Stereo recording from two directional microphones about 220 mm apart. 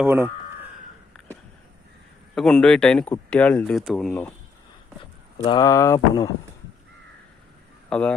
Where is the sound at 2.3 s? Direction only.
Centre (ahead or behind).